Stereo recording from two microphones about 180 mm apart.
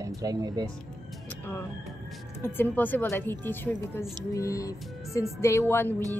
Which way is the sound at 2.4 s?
10° left (ahead or behind).